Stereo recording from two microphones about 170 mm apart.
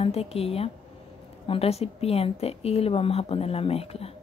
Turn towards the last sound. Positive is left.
turn(degrees=35)  # may be behind; listen again after turning